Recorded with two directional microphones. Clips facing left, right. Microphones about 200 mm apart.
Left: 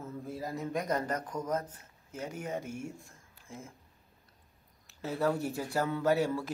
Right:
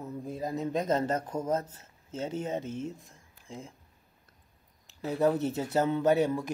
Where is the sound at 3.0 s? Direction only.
15° right (ahead or behind).